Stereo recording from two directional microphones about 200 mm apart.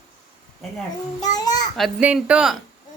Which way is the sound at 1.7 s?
5° right (ahead or behind).